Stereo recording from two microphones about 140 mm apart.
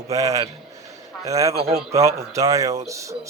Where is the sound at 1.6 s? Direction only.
50° right (ahead or behind).